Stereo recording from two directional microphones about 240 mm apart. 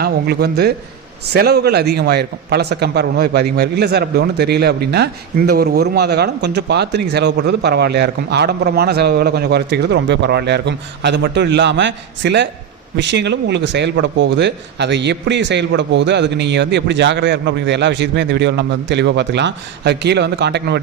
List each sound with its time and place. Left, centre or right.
0.0 s a man's voice: right